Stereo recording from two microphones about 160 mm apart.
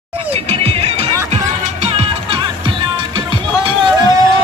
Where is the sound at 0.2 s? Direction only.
40° right (ahead or behind).